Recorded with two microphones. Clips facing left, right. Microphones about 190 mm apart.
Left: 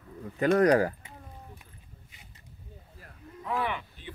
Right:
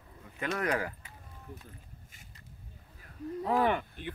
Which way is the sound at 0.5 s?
35° left (ahead or behind).